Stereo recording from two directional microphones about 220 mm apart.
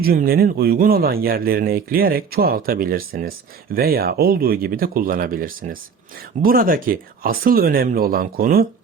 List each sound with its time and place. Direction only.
0.0 s speech: 45° right (ahead or behind)